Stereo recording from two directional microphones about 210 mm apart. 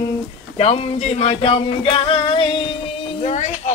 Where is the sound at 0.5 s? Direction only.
30° left (ahead or behind).